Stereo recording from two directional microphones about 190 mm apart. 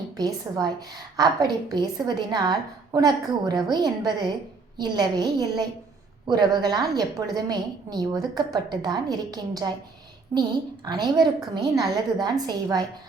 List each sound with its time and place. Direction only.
0.2 s a woman's voice: 20° right (ahead or behind)